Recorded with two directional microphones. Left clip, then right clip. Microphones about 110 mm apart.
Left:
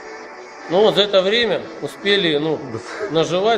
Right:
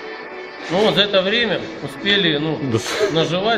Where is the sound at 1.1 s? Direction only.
60° left (ahead or behind).